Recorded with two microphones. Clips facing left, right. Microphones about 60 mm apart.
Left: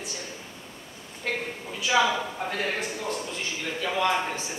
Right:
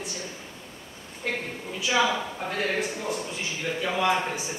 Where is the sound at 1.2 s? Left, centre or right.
Centre.